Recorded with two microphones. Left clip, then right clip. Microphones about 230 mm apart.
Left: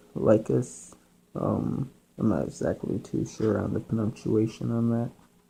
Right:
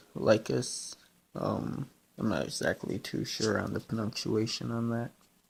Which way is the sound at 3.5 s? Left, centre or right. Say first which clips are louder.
Left 4 dB; right.